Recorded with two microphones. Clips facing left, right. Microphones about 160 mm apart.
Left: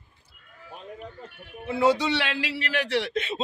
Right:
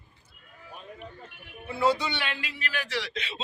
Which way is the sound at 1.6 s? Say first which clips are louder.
Left 4 dB; 85° left.